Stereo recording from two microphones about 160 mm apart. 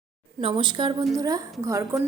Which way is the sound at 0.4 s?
30° right (ahead or behind).